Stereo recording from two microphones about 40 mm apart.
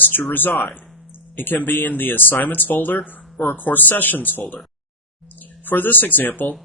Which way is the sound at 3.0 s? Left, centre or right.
Left.